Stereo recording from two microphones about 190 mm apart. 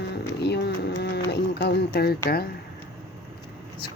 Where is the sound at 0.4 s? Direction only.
60° left (ahead or behind).